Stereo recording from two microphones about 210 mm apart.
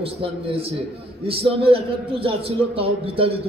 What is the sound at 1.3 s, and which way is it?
A man's voice, 25° right (ahead or behind).